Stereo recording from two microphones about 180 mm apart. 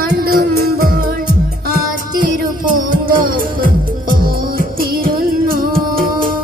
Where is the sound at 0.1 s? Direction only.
60° right (ahead or behind).